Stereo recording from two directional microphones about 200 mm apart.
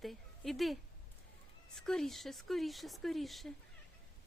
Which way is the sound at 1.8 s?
Centre (ahead or behind).